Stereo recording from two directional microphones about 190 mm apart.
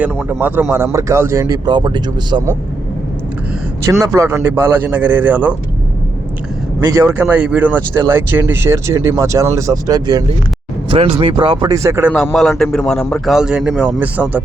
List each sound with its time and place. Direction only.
0.3 s speech: 10° right (ahead or behind)
4.0 s speech: 15° right (ahead or behind)
6.7 s speech: 15° right (ahead or behind)
12.1 s a man's voice: centre (ahead or behind)